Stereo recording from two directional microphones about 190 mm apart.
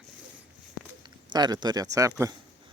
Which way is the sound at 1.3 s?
20° right (ahead or behind).